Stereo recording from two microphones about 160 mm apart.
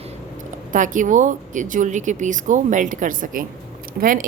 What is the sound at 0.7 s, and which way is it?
Speech, 55° right (ahead or behind).